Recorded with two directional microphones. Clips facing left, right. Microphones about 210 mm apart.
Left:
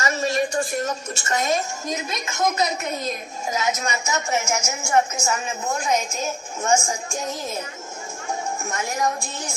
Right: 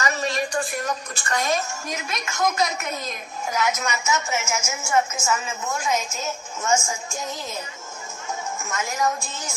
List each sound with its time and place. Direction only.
0.0 s a woman's voice: 25° left (ahead or behind)
8.7 s a woman's voice: 35° left (ahead or behind)